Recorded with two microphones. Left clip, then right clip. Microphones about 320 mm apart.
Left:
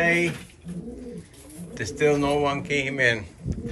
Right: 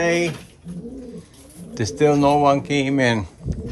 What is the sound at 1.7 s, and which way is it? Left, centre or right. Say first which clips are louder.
Speech: right 4 dB; centre.